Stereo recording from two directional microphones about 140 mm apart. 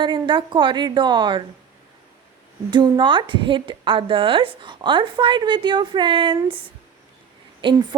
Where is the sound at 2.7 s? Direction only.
35° right (ahead or behind).